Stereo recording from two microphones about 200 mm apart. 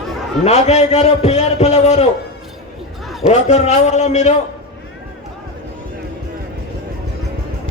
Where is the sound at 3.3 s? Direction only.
35° left (ahead or behind).